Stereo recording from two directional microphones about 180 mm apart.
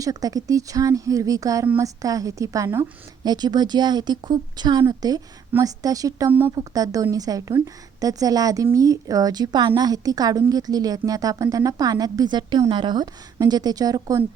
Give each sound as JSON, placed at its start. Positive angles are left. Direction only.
{"t": 0.0, "sound": "a woman's voice", "side_deg": -20}